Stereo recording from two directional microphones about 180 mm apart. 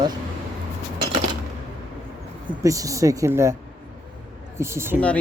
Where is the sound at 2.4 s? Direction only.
20° right (ahead or behind).